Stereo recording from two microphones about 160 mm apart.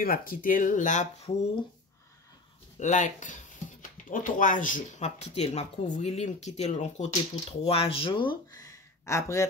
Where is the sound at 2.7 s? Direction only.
50° left (ahead or behind).